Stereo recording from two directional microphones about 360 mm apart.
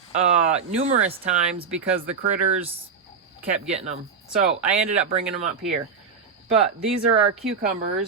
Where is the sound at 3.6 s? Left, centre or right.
Centre.